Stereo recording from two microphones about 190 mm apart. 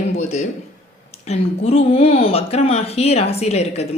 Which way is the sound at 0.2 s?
35° left (ahead or behind).